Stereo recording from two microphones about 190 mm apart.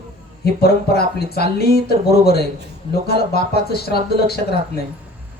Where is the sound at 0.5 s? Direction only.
55° left (ahead or behind).